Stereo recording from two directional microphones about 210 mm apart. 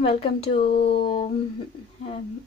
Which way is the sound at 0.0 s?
25° left (ahead or behind).